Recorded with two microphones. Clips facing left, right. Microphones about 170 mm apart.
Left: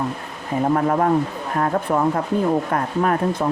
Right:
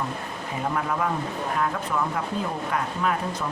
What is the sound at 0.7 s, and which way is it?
Speech, 45° left (ahead or behind).